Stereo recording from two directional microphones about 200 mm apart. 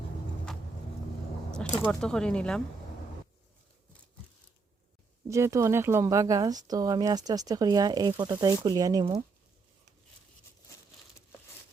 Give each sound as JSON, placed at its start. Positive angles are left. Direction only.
{"t": 1.8, "sound": "speech", "side_deg": 5}
{"t": 5.3, "sound": "speech", "side_deg": -15}